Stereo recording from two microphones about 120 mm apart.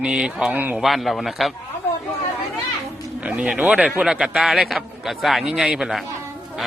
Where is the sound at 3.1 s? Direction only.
10° right (ahead or behind).